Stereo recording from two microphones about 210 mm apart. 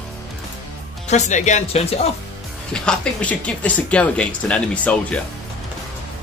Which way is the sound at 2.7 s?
5° left (ahead or behind).